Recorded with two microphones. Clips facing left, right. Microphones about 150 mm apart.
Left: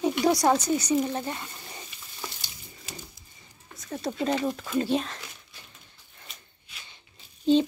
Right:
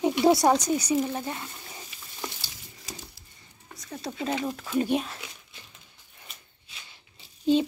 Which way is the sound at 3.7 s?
Centre (ahead or behind).